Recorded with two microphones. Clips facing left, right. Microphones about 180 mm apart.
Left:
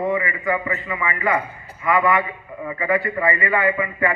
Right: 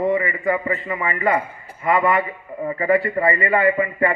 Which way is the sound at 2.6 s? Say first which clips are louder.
Right 3 dB; 35° right (ahead or behind).